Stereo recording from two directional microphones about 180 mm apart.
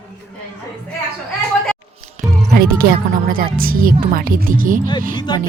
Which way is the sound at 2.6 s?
55° right (ahead or behind).